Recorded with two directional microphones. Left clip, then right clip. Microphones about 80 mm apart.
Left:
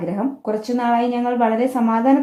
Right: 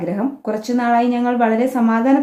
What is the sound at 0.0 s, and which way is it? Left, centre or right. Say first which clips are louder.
A woman's voice: right 1 dB; left.